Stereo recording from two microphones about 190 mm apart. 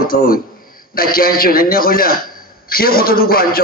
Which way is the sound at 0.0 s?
50° left (ahead or behind).